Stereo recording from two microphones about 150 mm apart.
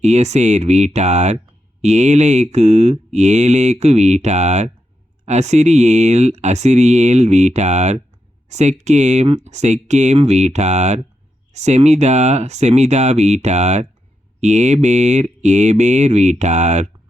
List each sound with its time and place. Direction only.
0.0 s mantra: 50° right (ahead or behind)